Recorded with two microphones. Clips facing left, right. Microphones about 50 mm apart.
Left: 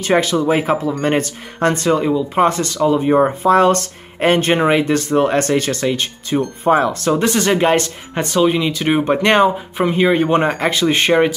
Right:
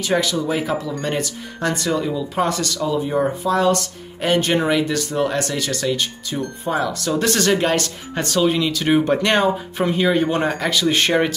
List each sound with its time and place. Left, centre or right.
0.0 s speech: left
7.2 s speech: left